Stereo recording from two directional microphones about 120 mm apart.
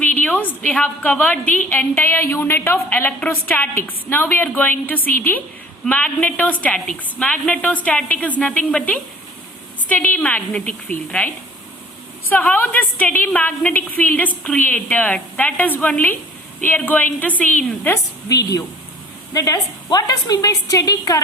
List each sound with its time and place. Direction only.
0.0 s a woman's voice: 10° left (ahead or behind)
12.3 s a woman's voice: 15° left (ahead or behind)
17.8 s a woman's voice: 25° left (ahead or behind)